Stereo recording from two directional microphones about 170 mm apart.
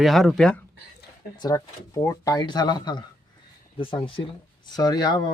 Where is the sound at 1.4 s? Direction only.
20° left (ahead or behind).